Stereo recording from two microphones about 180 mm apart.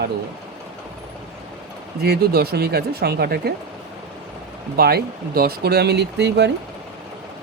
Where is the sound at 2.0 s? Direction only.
60° right (ahead or behind).